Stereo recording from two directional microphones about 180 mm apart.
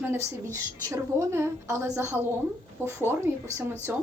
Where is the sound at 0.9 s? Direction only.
15° right (ahead or behind).